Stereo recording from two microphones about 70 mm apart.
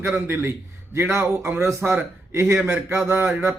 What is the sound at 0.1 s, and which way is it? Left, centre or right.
A man's voice, right.